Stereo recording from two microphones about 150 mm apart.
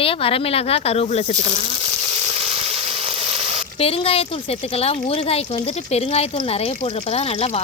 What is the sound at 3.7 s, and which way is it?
Speech, 40° left (ahead or behind).